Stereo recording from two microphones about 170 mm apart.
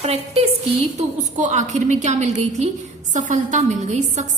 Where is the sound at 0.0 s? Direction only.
40° right (ahead or behind).